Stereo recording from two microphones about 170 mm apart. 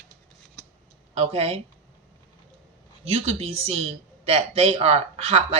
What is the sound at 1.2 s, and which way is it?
Speech, 35° right (ahead or behind).